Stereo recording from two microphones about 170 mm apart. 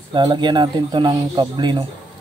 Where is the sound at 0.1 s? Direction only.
25° right (ahead or behind).